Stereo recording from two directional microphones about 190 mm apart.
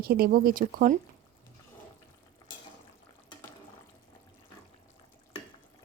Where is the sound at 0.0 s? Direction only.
50° right (ahead or behind).